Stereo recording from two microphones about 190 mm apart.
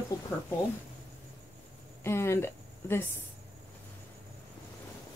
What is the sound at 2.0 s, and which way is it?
Speech, 15° left (ahead or behind).